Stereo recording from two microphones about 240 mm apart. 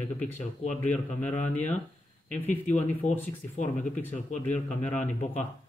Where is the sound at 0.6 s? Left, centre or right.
Left.